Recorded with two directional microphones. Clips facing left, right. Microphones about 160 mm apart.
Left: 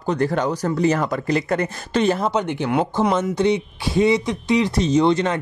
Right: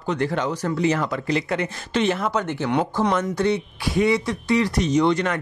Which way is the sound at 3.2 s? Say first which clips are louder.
Left 3 dB; 20° left (ahead or behind).